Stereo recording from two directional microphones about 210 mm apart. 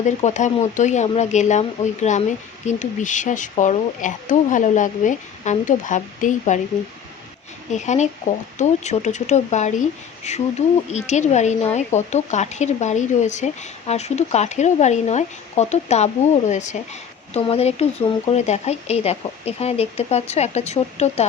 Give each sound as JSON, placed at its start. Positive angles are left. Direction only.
{"t": 0.0, "sound": "a woman's voice", "side_deg": 35}
{"t": 7.7, "sound": "a woman's voice", "side_deg": 35}